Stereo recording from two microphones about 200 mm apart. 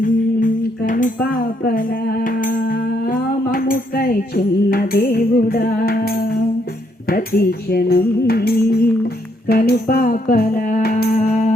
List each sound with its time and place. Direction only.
0.0 s speech: 40° left (ahead or behind)
7.1 s music: 50° left (ahead or behind)